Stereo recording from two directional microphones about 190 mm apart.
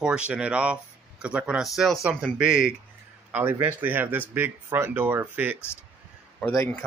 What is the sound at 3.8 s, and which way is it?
Speech, 10° right (ahead or behind).